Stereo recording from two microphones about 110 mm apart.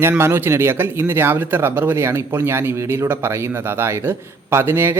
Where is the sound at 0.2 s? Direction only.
20° right (ahead or behind).